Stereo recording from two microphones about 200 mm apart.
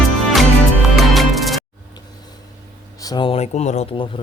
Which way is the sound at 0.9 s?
Centre (ahead or behind).